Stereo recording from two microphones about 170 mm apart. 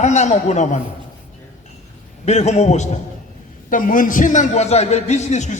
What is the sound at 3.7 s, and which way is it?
A woman's voice, 55° left (ahead or behind).